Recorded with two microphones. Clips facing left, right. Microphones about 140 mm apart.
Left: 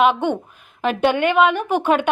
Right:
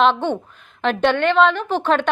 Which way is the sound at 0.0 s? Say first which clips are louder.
Even; 10° left (ahead or behind).